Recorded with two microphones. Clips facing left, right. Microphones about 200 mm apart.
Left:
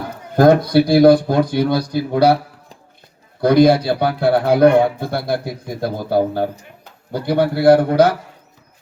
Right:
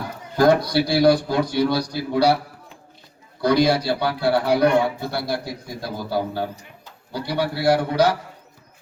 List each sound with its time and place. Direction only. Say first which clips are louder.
0.3 s a man's voice: left 5 dB; 55° left (ahead or behind)
3.4 s a man's voice: left 6 dB; 55° left (ahead or behind)